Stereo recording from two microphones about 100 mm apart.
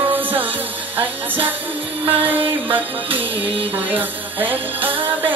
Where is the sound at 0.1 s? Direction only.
20° right (ahead or behind).